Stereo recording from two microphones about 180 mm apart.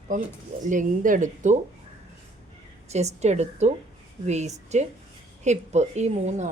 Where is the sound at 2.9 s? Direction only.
35° right (ahead or behind).